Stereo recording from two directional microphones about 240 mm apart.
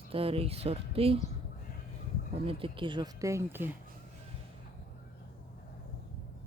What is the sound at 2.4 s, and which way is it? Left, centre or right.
Speech, right.